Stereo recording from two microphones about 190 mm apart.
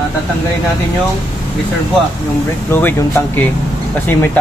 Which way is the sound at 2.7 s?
10° left (ahead or behind).